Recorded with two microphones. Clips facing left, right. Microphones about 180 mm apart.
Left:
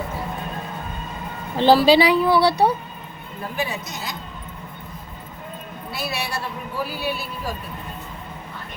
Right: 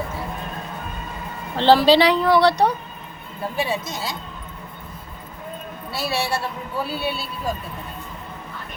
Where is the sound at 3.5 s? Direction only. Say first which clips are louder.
Right 3 dB; 30° right (ahead or behind).